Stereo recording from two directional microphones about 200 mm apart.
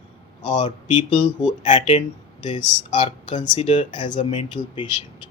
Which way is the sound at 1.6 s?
35° left (ahead or behind).